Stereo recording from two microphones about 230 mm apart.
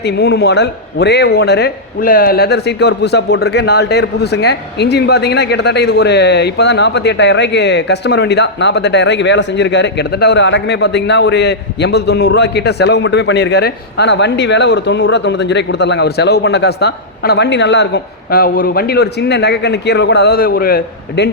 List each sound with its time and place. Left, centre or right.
0.0 s a man's voice: left